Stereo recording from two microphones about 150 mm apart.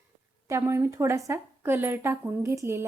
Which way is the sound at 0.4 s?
15° right (ahead or behind).